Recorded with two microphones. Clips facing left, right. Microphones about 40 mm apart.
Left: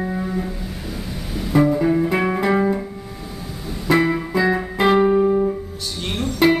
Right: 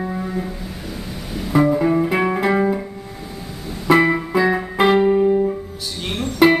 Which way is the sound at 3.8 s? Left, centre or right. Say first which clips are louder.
Right 3 dB; centre.